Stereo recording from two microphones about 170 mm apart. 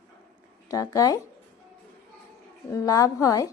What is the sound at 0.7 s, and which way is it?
Speech, 20° left (ahead or behind).